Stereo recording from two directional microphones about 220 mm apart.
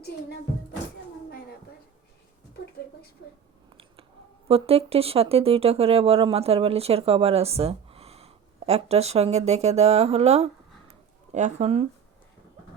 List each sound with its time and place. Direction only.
4.4 s speech: 25° right (ahead or behind)